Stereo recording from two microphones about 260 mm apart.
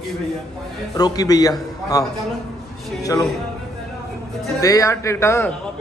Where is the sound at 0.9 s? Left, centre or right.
Centre.